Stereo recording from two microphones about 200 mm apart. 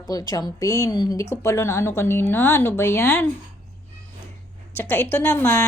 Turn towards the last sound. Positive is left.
turn(degrees=10)  # may be behind; listen again after turning